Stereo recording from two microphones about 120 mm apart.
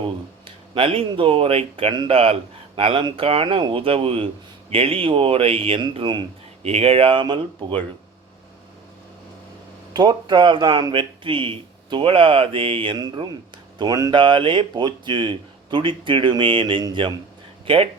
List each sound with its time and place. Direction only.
0.0 s speech: 45° right (ahead or behind)
6.6 s speech: 60° right (ahead or behind); by 7.4 s 45° right (ahead or behind)
9.9 s speech: 40° right (ahead or behind)